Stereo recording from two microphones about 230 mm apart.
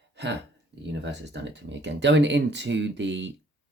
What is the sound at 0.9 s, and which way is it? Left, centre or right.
Speech, right.